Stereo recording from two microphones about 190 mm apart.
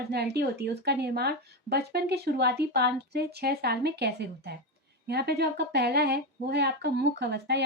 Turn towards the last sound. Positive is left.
turn(degrees=-60)  # may be behind; listen again after turning